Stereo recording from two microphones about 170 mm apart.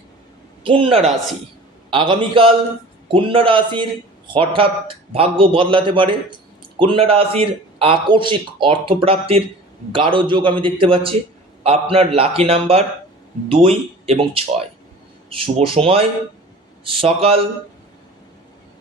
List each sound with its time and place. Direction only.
0.6 s a man's voice: 30° right (ahead or behind)